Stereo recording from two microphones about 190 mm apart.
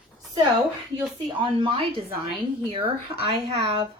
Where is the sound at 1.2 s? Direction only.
25° right (ahead or behind).